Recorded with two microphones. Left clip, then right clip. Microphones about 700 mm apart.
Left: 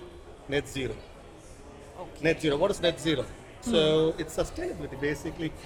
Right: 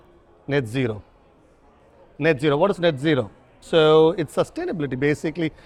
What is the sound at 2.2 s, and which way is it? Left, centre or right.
A man's voice, right.